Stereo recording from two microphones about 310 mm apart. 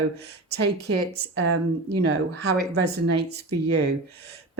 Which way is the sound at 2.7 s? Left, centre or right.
Right.